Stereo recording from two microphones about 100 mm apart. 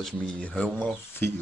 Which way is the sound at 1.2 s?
20° left (ahead or behind).